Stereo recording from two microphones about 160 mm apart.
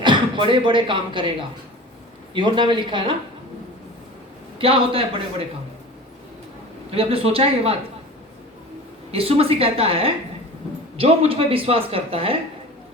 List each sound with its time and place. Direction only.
0.0 s speech: 30° right (ahead or behind)
2.3 s speech: 30° right (ahead or behind)
4.5 s speech: 35° right (ahead or behind)
6.9 s speech: 35° right (ahead or behind)
9.1 s speech: 35° right (ahead or behind)